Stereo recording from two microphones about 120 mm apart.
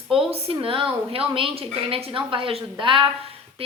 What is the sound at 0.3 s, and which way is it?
A woman's voice, 55° right (ahead or behind).